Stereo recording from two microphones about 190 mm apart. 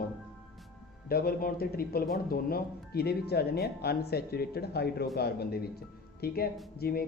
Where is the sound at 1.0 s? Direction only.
50° left (ahead or behind).